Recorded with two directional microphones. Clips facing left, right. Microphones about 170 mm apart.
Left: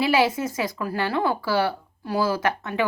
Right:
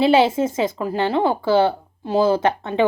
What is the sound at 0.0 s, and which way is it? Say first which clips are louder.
A woman's voice: right 6 dB; 25° right (ahead or behind).